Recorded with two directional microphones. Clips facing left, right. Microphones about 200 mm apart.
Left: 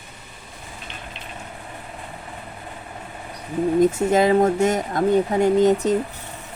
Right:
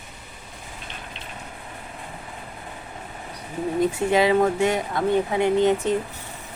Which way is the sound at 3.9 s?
45° left (ahead or behind).